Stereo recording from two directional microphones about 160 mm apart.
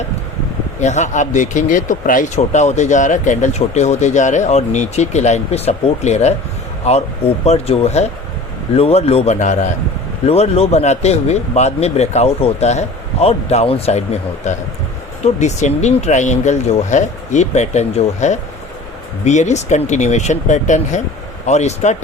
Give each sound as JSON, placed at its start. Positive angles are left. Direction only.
{"t": 0.8, "sound": "speech", "side_deg": 45}
{"t": 10.2, "sound": "speech", "side_deg": 40}